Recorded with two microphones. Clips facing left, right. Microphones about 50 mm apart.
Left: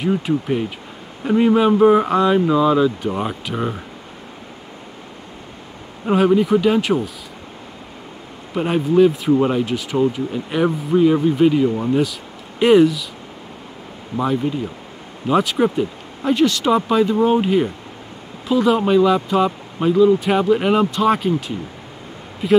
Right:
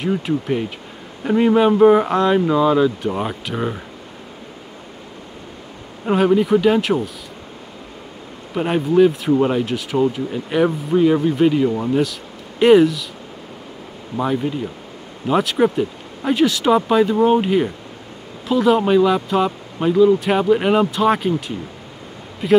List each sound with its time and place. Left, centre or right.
0.0 s speech: centre
6.0 s speech: centre
8.5 s speech: centre
14.1 s speech: centre